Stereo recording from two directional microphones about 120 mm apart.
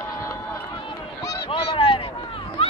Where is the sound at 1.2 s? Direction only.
30° left (ahead or behind).